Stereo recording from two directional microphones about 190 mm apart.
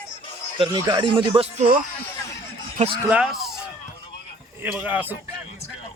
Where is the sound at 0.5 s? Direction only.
25° right (ahead or behind).